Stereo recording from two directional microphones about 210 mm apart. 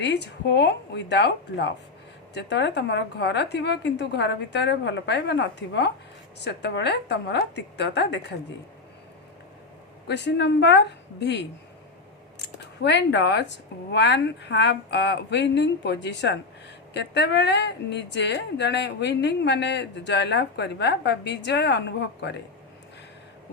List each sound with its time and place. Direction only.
0.0 s a woman's voice: 55° left (ahead or behind)
10.1 s a woman's voice: 55° left (ahead or behind)